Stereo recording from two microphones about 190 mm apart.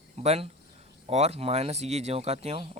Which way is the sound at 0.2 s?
35° right (ahead or behind).